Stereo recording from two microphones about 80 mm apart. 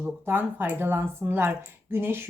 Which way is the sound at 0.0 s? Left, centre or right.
Right.